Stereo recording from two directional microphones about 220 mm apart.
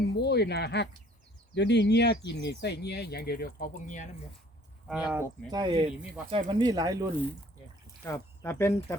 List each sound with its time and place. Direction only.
0.0 s speech: 50° left (ahead or behind)
4.9 s speech: 5° right (ahead or behind)
5.5 s speech: 20° right (ahead or behind)
8.0 s speech: 15° left (ahead or behind)